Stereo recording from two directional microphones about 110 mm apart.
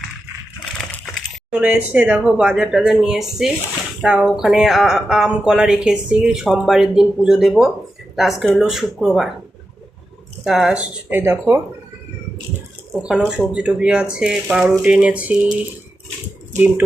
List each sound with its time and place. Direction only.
1.5 s speech: 10° right (ahead or behind)
10.4 s speech: 5° right (ahead or behind)
11.1 s speech: 20° right (ahead or behind)
12.9 s speech: 5° right (ahead or behind)